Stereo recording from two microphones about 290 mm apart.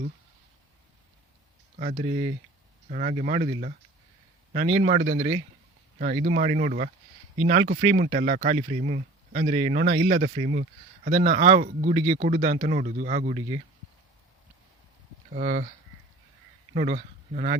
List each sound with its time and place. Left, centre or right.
1.7 s speech: right
15.4 s speech: right
16.7 s speech: right